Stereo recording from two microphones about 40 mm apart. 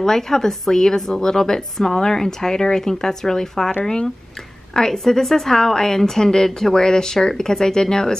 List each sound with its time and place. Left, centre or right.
0.0 s a woman's voice: centre